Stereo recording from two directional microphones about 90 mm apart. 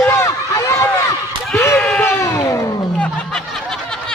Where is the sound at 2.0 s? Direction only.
30° left (ahead or behind).